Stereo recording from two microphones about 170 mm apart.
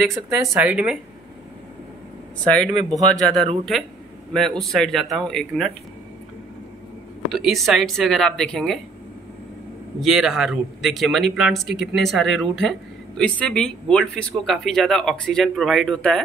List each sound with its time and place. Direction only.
0.1 s speech: 15° right (ahead or behind)
2.4 s speech: 5° left (ahead or behind)
7.3 s speech: centre (ahead or behind)
10.0 s speech: centre (ahead or behind)